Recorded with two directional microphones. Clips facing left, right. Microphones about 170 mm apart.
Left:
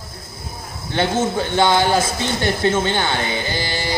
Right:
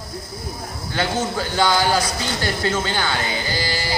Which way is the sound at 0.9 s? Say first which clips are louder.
Left 4 dB; 25° left (ahead or behind).